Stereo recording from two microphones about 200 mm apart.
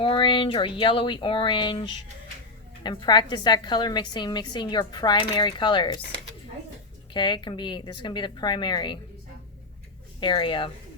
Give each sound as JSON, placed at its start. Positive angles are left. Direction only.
{"t": 0.0, "sound": "a woman's voice", "side_deg": 25}
{"t": 7.1, "sound": "a woman's voice", "side_deg": 25}
{"t": 10.2, "sound": "a woman's voice", "side_deg": 25}